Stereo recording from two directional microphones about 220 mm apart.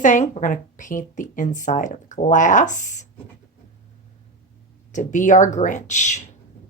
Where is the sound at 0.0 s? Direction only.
35° left (ahead or behind).